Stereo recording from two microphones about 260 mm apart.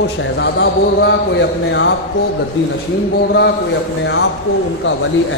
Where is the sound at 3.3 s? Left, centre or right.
Left.